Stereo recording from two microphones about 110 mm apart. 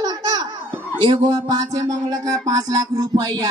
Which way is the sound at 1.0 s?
40° right (ahead or behind).